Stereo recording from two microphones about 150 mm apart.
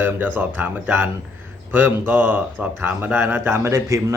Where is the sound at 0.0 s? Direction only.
15° right (ahead or behind).